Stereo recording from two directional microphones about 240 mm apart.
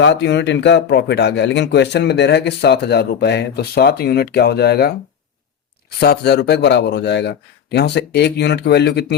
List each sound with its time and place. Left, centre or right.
0.0 s speech: left
6.0 s speech: left